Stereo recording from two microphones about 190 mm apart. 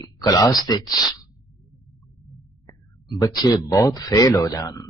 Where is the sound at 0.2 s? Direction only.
20° left (ahead or behind).